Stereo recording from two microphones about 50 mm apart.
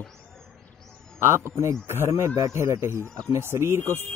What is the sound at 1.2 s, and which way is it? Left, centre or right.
Speech, right.